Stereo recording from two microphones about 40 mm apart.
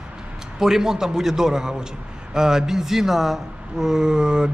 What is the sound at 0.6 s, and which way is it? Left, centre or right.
A man's voice, centre.